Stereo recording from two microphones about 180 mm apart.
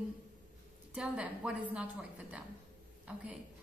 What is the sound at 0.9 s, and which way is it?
A woman's voice, 5° right (ahead or behind).